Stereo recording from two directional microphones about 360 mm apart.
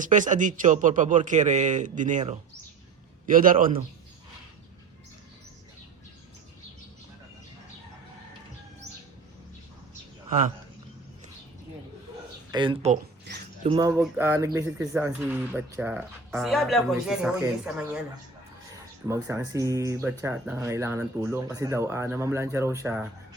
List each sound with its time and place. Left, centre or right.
0.0 s a man's voice: right
10.2 s speech: right
12.5 s speech: centre
13.3 s mouse: right
13.7 s speech: centre
19.0 s speech: centre